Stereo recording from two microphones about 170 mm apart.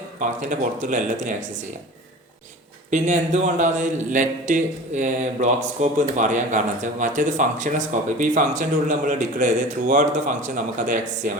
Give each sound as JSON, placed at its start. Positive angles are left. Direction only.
{"t": 0.2, "sound": "a man's voice", "side_deg": -50}
{"t": 2.9, "sound": "a man's voice", "side_deg": -45}